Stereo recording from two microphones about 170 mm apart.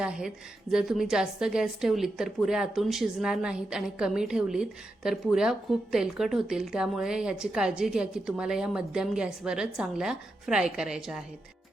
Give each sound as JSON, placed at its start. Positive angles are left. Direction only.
{"t": 0.0, "sound": "a woman's voice", "side_deg": -5}